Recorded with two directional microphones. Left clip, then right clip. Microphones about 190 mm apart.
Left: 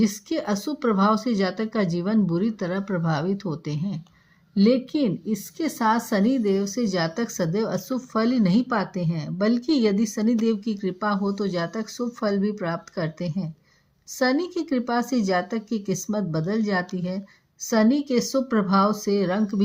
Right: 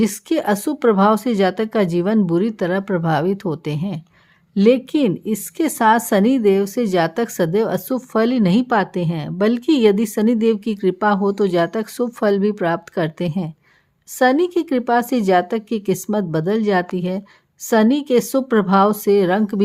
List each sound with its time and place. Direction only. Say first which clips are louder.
0.0 s a woman's voice: right 7 dB; 50° right (ahead or behind)